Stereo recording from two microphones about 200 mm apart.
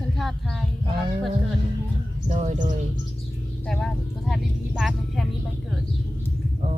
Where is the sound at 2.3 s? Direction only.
35° right (ahead or behind).